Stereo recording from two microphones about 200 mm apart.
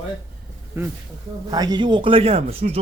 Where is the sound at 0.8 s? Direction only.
10° right (ahead or behind).